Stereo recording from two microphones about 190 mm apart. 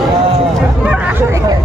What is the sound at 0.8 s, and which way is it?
Hubbub, 5° right (ahead or behind).